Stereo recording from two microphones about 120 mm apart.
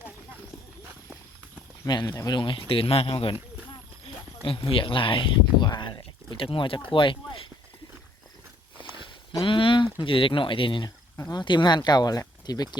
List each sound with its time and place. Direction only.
1.9 s speech: 35° left (ahead or behind)
4.4 s speech: 45° left (ahead or behind)
6.3 s speech: 45° left (ahead or behind)
9.4 s speech: 45° left (ahead or behind)
10.8 s speech: 35° left (ahead or behind)